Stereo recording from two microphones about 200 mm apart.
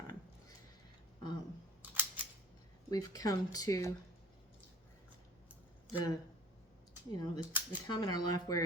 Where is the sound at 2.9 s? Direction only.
20° left (ahead or behind).